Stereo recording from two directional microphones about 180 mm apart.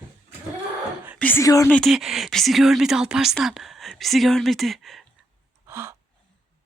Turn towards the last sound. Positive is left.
turn(degrees=-15)  # may be behind; listen again after turning